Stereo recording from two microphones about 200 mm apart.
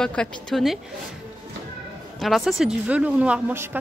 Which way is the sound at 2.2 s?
Centre (ahead or behind).